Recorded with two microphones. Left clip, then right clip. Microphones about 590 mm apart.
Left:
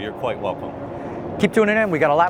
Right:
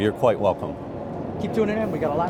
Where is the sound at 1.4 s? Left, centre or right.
Left.